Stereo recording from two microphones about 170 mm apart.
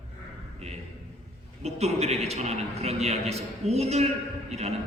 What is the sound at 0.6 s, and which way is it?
A man's voice, 40° right (ahead or behind).